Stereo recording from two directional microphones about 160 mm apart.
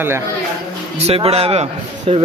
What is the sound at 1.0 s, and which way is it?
Speech, 40° right (ahead or behind).